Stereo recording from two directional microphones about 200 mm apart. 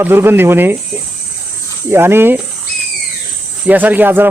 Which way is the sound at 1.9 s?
10° right (ahead or behind).